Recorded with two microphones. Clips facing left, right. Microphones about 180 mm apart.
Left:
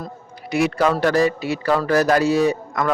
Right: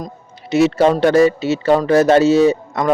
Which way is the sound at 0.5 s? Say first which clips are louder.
Right 6 dB; 25° right (ahead or behind).